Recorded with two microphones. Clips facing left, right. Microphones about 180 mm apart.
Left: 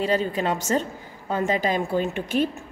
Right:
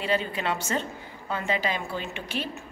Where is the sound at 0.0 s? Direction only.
40° left (ahead or behind).